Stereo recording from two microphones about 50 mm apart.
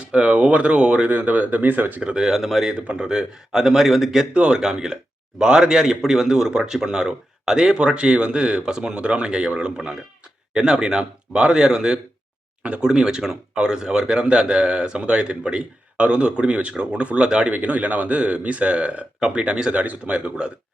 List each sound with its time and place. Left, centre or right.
0.1 s a man's voice: right
2.0 s speech: centre
2.7 s a man's voice: right
17.5 s a man's voice: right